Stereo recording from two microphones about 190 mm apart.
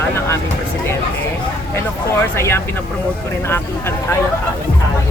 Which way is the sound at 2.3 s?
15° left (ahead or behind).